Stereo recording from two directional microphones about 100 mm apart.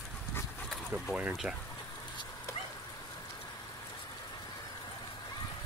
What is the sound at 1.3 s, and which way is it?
Speech, 5° right (ahead or behind).